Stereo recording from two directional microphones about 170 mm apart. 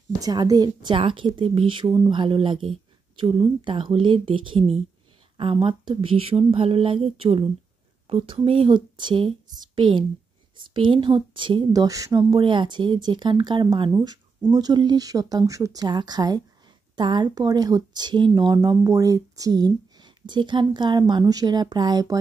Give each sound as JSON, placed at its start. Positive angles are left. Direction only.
{"t": 0.2, "sound": "a woman's voice", "side_deg": -20}